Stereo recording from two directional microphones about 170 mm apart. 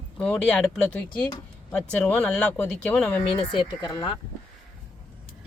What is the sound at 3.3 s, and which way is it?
Speech, 30° left (ahead or behind).